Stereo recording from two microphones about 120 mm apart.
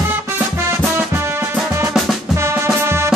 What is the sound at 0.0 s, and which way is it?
Music, 20° right (ahead or behind).